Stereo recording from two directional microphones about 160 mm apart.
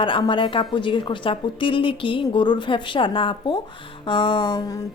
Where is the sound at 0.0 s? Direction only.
30° left (ahead or behind).